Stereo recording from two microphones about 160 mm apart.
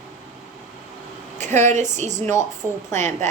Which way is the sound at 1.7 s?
50° right (ahead or behind).